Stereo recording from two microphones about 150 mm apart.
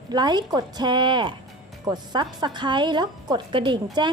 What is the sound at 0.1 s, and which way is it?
A woman's voice, 30° right (ahead or behind).